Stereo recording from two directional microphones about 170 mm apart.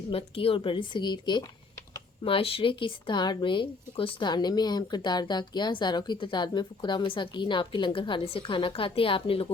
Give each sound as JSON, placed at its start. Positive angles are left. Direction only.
{"t": 0.1, "sound": "speech", "side_deg": 35}